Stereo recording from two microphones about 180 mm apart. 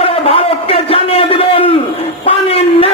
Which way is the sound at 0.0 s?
30° left (ahead or behind).